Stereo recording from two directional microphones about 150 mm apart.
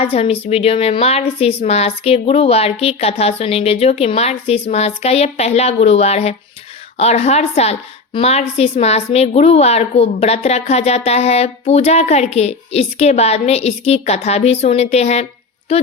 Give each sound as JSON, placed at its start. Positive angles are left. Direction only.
{"t": 0.0, "sound": "a woman's voice", "side_deg": 40}